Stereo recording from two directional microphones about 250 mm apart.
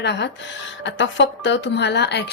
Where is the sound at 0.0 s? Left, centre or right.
Left.